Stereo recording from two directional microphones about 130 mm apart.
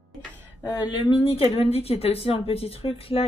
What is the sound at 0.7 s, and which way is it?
Speech, 30° left (ahead or behind).